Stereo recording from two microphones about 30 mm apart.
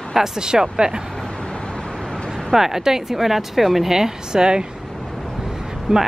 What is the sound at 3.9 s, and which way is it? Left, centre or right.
Speech, right.